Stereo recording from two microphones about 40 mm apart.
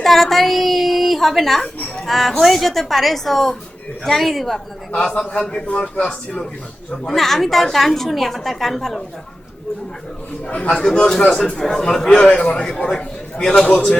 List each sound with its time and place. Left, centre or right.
0.0 s a woman's voice: centre
5.3 s a man's voice: left
7.1 s a woman's voice: centre
10.7 s a man's voice: left
11.6 s a man's voice: centre